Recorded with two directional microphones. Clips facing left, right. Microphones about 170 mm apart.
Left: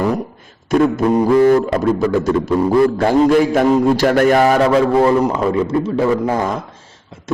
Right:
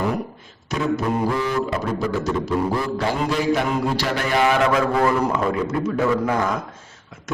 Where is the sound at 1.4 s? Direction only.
50° left (ahead or behind).